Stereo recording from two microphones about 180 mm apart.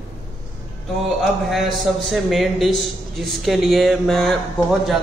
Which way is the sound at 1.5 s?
Centre (ahead or behind).